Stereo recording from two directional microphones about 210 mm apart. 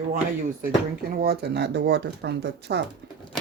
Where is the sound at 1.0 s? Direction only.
45° right (ahead or behind).